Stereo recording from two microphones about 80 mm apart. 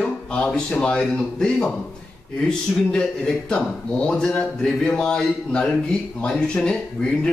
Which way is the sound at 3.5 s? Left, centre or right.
Centre.